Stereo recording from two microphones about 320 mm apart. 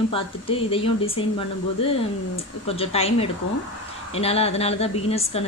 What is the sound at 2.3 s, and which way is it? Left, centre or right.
Speech, centre.